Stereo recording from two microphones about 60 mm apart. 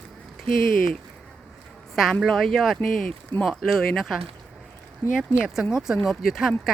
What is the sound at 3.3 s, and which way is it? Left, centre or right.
Speech, left.